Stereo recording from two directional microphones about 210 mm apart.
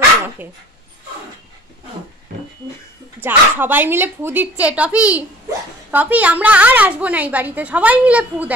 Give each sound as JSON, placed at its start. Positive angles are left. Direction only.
{"t": 3.2, "sound": "a woman's voice", "side_deg": -10}